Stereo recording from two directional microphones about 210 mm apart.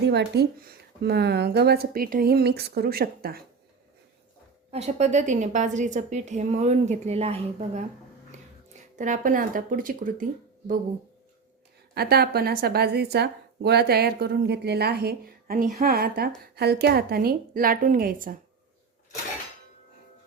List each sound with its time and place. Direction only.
0.0 s a woman's voice: 55° right (ahead or behind)
4.7 s a woman's voice: 30° right (ahead or behind)
11.9 s a woman's voice: 50° right (ahead or behind)